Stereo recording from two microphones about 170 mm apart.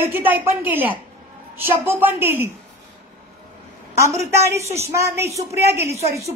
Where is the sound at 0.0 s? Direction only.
10° right (ahead or behind).